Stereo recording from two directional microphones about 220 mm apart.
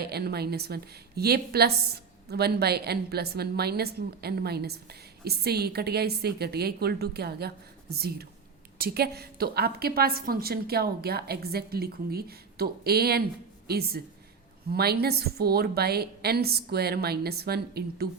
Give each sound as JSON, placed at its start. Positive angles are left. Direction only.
{"t": 0.0, "sound": "a woman's voice", "side_deg": -45}